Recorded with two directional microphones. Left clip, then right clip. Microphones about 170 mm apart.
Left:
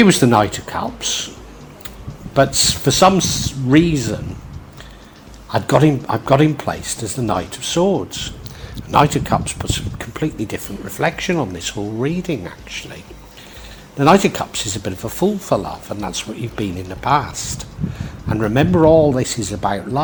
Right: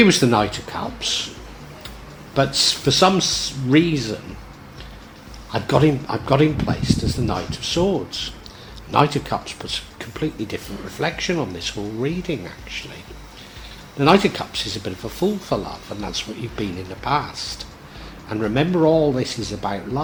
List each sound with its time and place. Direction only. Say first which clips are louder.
0.0 s speech: left 3 dB; 40° left (ahead or behind)
2.3 s speech: left 3 dB; 35° left (ahead or behind)
5.5 s speech: left 3 dB; 35° left (ahead or behind)
14.0 s speech: left 3 dB; 35° left (ahead or behind)